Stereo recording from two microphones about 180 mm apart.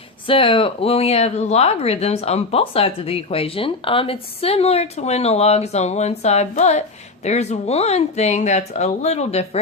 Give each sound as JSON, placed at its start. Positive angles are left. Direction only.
{"t": 0.3, "sound": "speech", "side_deg": 30}